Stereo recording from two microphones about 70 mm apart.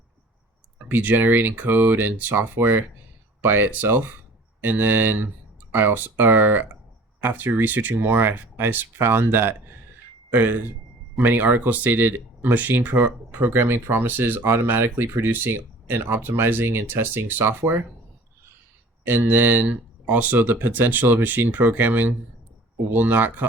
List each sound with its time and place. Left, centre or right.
0.9 s speech: right
10.3 s speech: right
19.0 s speech: right